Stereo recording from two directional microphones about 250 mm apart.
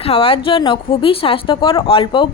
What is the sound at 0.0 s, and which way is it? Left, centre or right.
A woman's voice, left.